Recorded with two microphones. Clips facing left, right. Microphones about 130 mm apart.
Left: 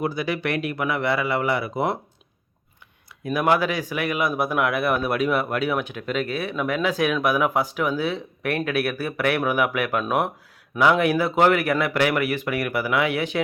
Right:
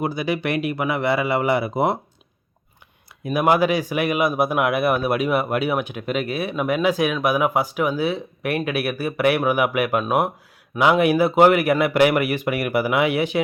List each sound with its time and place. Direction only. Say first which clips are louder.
0.0 s a man's voice: right 2 dB; 10° right (ahead or behind)
3.2 s a man's voice: right 3 dB; 10° right (ahead or behind)